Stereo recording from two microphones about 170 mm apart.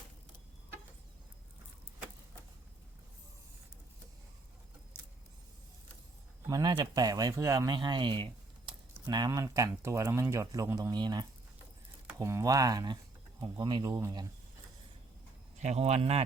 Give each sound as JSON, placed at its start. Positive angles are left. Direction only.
{"t": 6.5, "sound": "speech", "side_deg": -20}
{"t": 15.5, "sound": "speech", "side_deg": -40}